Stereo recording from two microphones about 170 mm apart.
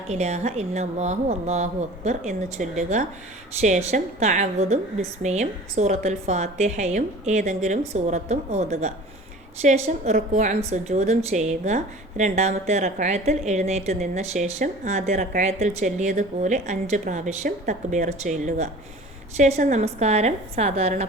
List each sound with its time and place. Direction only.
0.1 s a woman's voice: 40° right (ahead or behind)